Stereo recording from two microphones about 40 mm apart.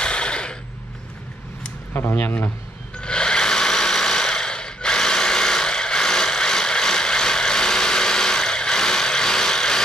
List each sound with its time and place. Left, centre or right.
0.0 s mechanisms: left
2.0 s speech: left
3.0 s sewing machine: left